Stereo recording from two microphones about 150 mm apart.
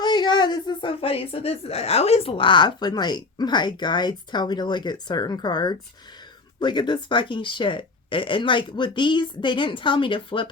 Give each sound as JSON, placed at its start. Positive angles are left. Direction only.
{"t": 0.0, "sound": "speech", "side_deg": 30}